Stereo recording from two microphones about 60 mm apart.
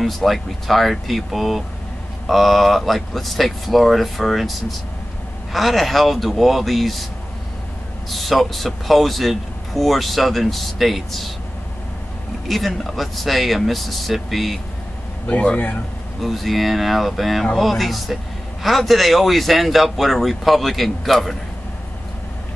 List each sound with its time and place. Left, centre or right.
0.0 s a man's voice: centre
8.1 s a man's voice: centre
12.4 s a man's voice: centre
15.2 s speech: left
16.2 s a man's voice: centre